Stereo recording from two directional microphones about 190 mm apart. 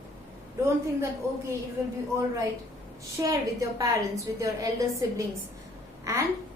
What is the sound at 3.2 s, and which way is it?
A woman's voice, 15° right (ahead or behind).